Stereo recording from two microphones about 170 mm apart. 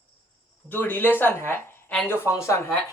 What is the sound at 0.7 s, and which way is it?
Speech, 10° left (ahead or behind).